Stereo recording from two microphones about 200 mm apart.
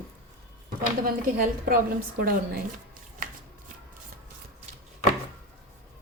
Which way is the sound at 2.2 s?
45° right (ahead or behind).